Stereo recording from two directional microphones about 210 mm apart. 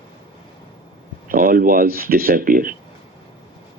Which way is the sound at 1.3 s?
40° right (ahead or behind).